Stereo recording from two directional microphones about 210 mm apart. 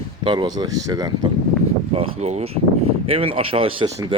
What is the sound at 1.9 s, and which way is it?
A man's voice, 30° right (ahead or behind).